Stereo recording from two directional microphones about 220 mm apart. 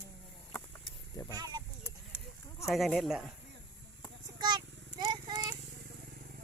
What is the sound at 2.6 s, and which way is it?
Speech, centre (ahead or behind).